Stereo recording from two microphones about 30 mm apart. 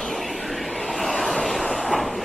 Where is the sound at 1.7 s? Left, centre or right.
Centre.